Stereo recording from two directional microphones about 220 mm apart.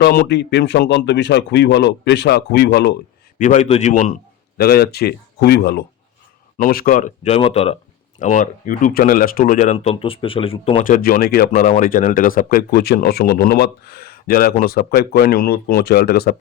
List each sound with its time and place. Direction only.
0.0 s speech: 45° left (ahead or behind)
3.3 s a man's voice: 35° left (ahead or behind)
10.8 s speech: 40° left (ahead or behind)